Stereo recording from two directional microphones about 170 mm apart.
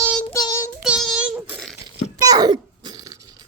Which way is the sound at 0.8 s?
5° right (ahead or behind).